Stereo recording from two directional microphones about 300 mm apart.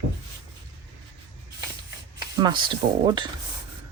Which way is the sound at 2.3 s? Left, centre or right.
Centre.